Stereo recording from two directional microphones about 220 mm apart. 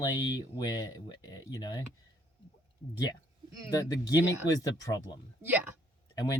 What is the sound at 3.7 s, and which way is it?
Speech, 15° left (ahead or behind).